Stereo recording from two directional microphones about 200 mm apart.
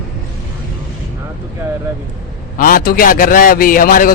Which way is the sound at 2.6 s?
45° left (ahead or behind).